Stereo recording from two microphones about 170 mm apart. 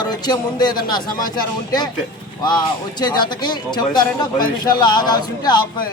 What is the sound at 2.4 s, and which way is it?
Speech, 25° left (ahead or behind).